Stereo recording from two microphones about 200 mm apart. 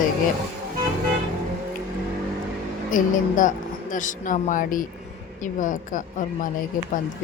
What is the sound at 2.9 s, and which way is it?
Speech, 40° left (ahead or behind).